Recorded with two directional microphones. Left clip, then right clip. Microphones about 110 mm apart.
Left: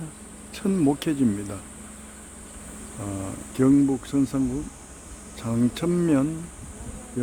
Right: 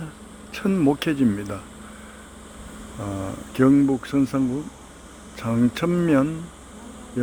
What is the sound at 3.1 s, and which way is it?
Speech, 40° right (ahead or behind).